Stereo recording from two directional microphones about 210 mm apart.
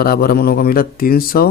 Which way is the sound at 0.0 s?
45° left (ahead or behind).